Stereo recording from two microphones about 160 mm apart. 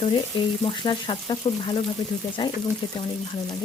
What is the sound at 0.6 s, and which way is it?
Frying, 30° left (ahead or behind).